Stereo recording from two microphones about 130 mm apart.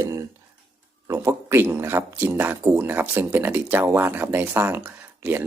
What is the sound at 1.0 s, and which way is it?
Speech, 20° right (ahead or behind).